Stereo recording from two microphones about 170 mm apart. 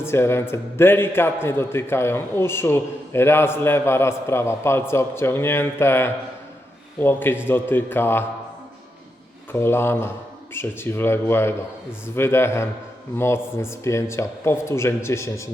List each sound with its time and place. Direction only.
0.0 s a man's voice: 15° left (ahead or behind)
9.5 s a man's voice: 15° left (ahead or behind)